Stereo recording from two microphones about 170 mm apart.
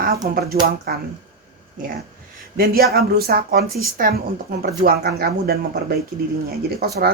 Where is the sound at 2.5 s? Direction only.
60° right (ahead or behind).